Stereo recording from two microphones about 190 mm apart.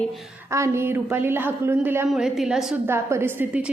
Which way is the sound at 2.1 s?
Centre (ahead or behind).